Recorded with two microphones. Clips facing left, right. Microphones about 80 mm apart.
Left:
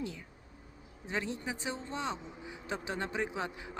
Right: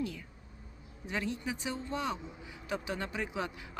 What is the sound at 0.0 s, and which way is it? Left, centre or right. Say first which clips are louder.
Speech: right 3 dB; left.